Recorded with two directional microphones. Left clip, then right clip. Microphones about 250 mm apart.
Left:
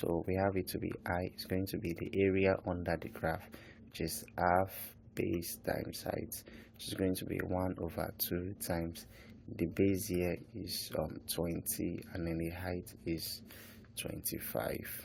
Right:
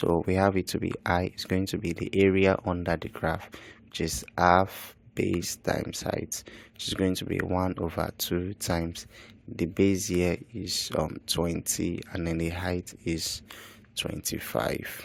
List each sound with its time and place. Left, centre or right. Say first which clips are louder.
0.0 s speech: right 9 dB; right